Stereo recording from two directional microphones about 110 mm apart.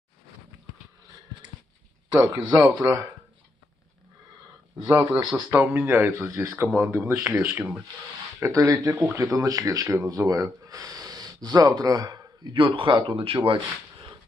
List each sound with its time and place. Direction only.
2.0 s speech: 40° right (ahead or behind)
4.8 s speech: 35° right (ahead or behind)
5.3 s speech: 15° right (ahead or behind)
8.4 s speech: 30° right (ahead or behind)
12.5 s speech: 50° right (ahead or behind)